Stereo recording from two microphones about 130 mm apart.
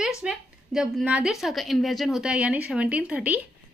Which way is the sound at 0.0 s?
5° right (ahead or behind).